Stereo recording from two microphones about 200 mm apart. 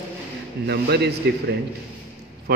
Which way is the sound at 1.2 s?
55° right (ahead or behind).